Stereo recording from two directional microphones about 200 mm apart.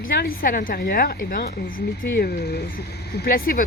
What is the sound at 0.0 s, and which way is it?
Speech, 45° left (ahead or behind).